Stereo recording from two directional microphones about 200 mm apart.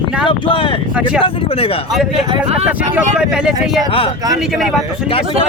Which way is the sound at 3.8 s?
25° left (ahead or behind).